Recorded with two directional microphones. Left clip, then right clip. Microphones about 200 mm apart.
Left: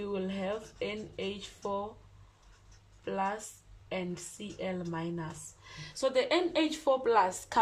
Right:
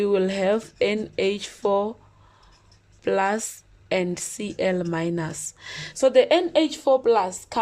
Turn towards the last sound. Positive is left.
turn(degrees=-15)  # may be behind; listen again after turning